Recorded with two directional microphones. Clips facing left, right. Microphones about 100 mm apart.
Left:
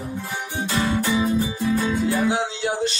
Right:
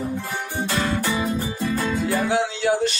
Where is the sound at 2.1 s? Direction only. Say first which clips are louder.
Right 1 dB; 20° left (ahead or behind).